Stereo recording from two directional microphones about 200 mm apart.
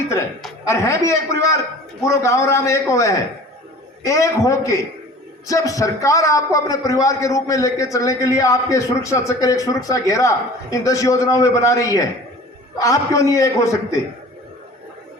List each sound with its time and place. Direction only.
0.7 s a man's voice: 15° left (ahead or behind)